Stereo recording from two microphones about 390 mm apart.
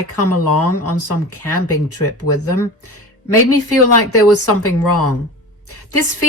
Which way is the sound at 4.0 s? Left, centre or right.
Left.